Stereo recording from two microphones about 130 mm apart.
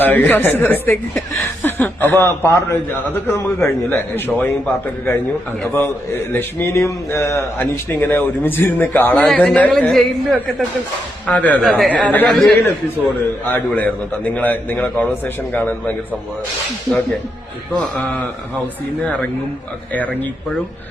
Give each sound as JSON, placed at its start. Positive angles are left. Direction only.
{"t": 0.0, "sound": "a man's voice", "side_deg": 15}
{"t": 11.6, "sound": "speech", "side_deg": 0}
{"t": 11.9, "sound": "a man's voice", "side_deg": 10}
{"t": 17.7, "sound": "a man's voice", "side_deg": 10}